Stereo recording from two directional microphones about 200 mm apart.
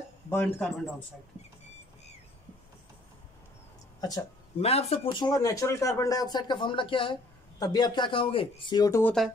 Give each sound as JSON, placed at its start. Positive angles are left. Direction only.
{"t": 0.3, "sound": "a man's voice", "side_deg": 5}
{"t": 4.6, "sound": "speech", "side_deg": 30}